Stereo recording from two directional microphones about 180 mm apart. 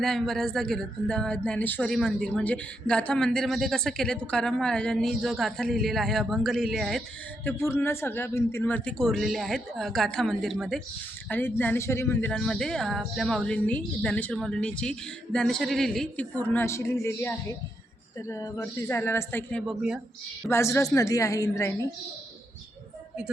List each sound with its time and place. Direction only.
0.0 s speech: centre (ahead or behind)
7.4 s speech: 15° left (ahead or behind)
19.6 s speech: 5° right (ahead or behind)
20.5 s speech: 15° left (ahead or behind)